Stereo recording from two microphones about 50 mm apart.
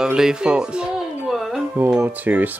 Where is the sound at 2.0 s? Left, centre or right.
Right.